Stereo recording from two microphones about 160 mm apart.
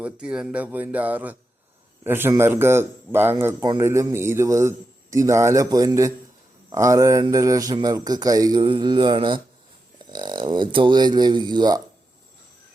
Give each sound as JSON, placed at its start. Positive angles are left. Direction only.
{"t": 0.0, "sound": "a man's voice", "side_deg": -5}